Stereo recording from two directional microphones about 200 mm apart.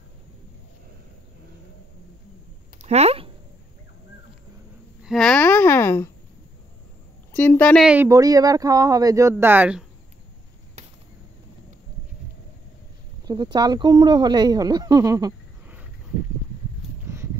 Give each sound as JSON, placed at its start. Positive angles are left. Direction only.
{"t": 2.8, "sound": "a sound", "side_deg": -30}
{"t": 5.0, "sound": "a sound", "side_deg": 0}
{"t": 7.3, "sound": "speech", "side_deg": 10}
{"t": 7.8, "sound": "speech", "side_deg": -5}
{"t": 8.1, "sound": "speech", "side_deg": -20}
{"t": 13.3, "sound": "speech", "side_deg": -20}